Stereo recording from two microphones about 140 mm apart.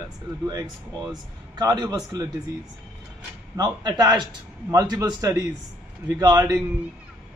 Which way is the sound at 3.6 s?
30° right (ahead or behind).